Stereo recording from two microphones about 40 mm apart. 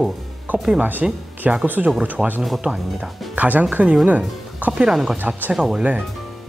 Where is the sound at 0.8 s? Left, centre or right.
Right.